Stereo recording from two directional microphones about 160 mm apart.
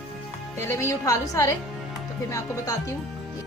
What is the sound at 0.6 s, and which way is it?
A woman's voice, 15° left (ahead or behind).